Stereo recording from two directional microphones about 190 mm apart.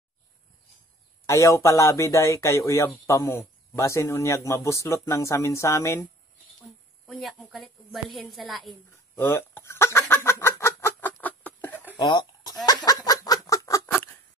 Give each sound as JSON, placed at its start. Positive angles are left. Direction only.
{"t": 1.2, "sound": "speech", "side_deg": 15}
{"t": 7.1, "sound": "a woman's voice", "side_deg": 0}
{"t": 9.1, "sound": "fowl", "side_deg": 10}
{"t": 12.0, "sound": "a sound", "side_deg": 20}